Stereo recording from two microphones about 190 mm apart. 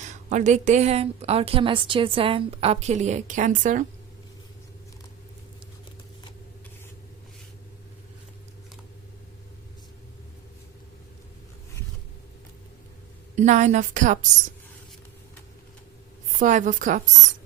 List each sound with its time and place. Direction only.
0.0 s a woman's voice: 40° right (ahead or behind)
13.3 s a woman's voice: 40° right (ahead or behind)
16.4 s a woman's voice: 40° right (ahead or behind)